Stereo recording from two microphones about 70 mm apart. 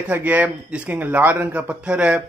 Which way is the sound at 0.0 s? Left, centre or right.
Right.